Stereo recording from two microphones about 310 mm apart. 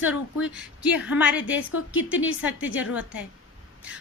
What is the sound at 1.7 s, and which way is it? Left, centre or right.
Speech, left.